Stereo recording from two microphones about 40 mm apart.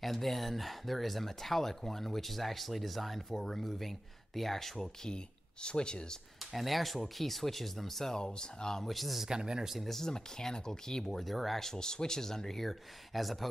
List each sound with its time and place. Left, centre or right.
0.0 s speech: centre; by 6.1 s left
6.5 s speech: centre
8.2 s speech: left
8.8 s speech: centre
9.3 s speech: centre
9.8 s speech: centre
11.2 s speech: centre
11.6 s speech: centre